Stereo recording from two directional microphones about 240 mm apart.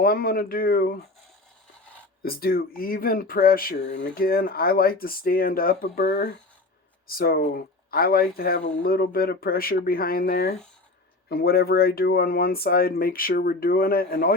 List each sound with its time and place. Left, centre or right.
0.0 s speech: left
2.2 s speech: left